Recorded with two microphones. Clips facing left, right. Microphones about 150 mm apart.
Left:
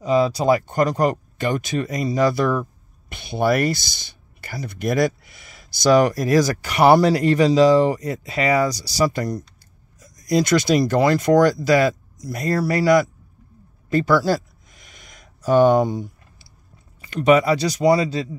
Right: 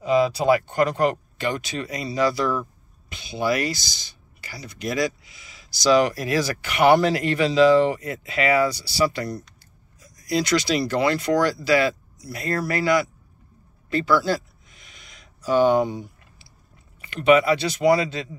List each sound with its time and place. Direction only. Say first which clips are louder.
0.0 s speech: left 1 dB; 35° left (ahead or behind)
13.8 s a sound: left 3 dB; 45° left (ahead or behind)
17.0 s speech: left 1 dB; 35° left (ahead or behind)